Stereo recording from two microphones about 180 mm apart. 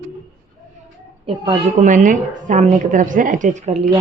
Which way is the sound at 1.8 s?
45° right (ahead or behind).